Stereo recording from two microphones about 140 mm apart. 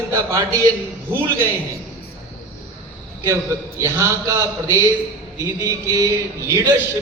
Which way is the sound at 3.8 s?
20° right (ahead or behind).